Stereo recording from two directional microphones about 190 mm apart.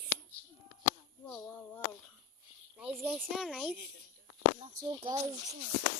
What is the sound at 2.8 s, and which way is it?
Speech, 5° right (ahead or behind).